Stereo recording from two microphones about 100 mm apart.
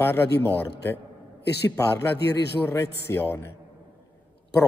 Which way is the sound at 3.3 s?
25° left (ahead or behind).